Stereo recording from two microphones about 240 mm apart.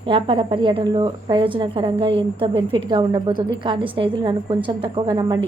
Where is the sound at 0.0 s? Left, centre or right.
Right.